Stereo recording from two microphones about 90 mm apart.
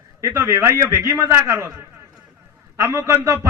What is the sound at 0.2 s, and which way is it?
Speech, 35° right (ahead or behind).